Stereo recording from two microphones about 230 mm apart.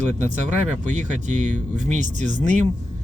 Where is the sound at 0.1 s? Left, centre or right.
Right.